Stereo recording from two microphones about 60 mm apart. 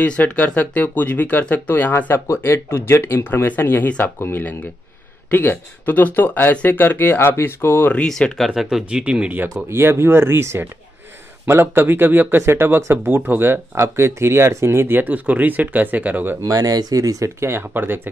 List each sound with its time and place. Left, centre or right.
0.0 s speech: left
8.0 s speech: centre
8.5 s speech: centre
9.7 s speech: right
14.9 s speech: right
16.4 s speech: right
17.4 s speech: right